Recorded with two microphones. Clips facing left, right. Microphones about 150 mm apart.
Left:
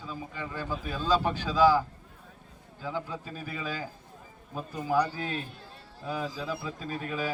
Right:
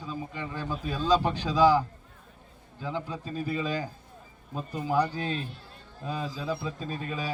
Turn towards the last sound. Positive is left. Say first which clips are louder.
# even
turn(degrees=-20)  # may be behind; listen again after turning